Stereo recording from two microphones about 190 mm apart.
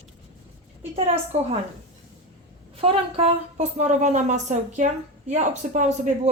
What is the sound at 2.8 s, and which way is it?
Speech, 30° right (ahead or behind).